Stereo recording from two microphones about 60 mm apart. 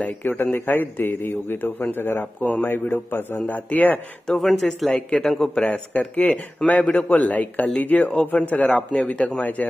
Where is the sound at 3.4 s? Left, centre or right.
Left.